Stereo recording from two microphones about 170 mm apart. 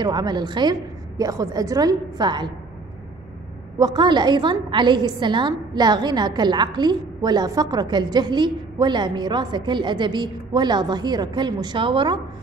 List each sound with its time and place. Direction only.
0.0 s a woman's voice: 25° right (ahead or behind)
3.7 s a woman's voice: 25° right (ahead or behind)